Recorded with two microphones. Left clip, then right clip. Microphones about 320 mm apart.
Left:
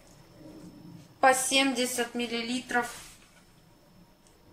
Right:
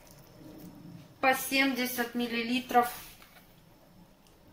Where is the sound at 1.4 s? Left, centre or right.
Centre.